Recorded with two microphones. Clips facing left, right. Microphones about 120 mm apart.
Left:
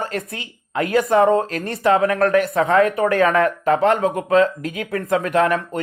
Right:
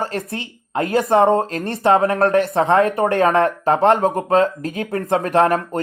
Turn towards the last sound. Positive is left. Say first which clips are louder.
# right 2 dB
turn(degrees=-35)  # may be behind; listen again after turning